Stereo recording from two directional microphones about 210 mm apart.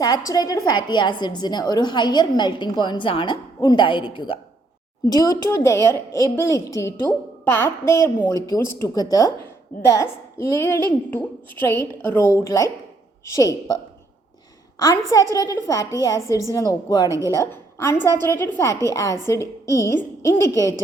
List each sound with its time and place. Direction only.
0.0 s a woman's voice: 20° left (ahead or behind)
14.8 s a woman's voice: 15° left (ahead or behind)
17.1 s a woman's voice: 15° right (ahead or behind)
17.3 s a woman's voice: 10° left (ahead or behind)